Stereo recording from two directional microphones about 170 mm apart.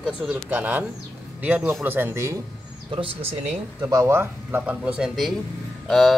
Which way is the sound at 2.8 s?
30° right (ahead or behind).